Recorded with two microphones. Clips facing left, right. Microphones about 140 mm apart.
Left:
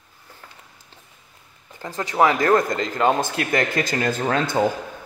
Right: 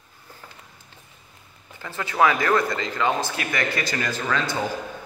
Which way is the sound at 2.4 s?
45° left (ahead or behind).